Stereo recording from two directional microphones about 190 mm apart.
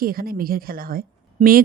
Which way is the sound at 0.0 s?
50° right (ahead or behind).